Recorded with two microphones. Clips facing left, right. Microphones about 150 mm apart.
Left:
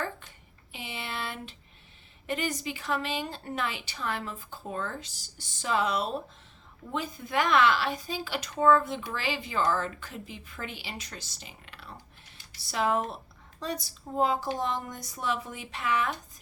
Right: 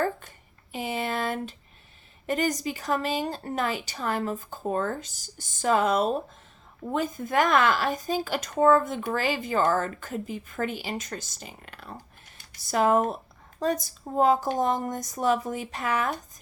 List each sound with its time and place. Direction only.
0.0 s speech: 45° right (ahead or behind)